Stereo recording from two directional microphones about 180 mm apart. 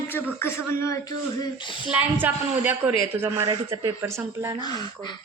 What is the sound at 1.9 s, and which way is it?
A woman's voice, 10° right (ahead or behind).